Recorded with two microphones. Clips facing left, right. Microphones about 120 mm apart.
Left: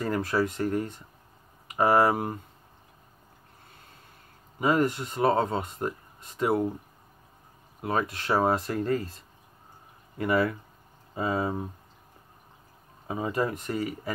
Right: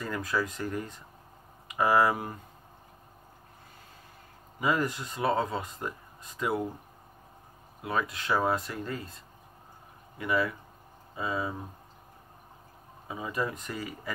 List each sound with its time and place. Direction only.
0.0 s speech: 35° left (ahead or behind)
4.6 s speech: 25° left (ahead or behind)
7.8 s speech: 30° left (ahead or behind)
8.7 s speech: 45° left (ahead or behind)
10.1 s speech: 40° left (ahead or behind)
13.7 s speech: 30° left (ahead or behind)